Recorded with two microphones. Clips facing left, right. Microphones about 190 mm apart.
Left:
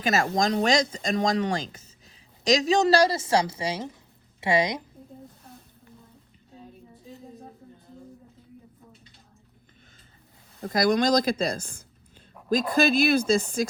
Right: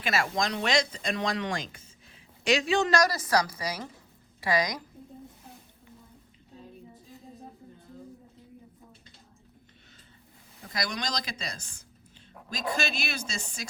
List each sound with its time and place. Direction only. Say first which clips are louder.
0.0 s a woman's voice: left 5 dB; 40° left (ahead or behind); by 4.8 s 25° left (ahead or behind)
10.6 s speech: left 12 dB; 55° left (ahead or behind)